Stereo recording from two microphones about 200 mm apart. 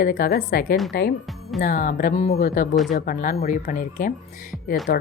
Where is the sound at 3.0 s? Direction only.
45° left (ahead or behind).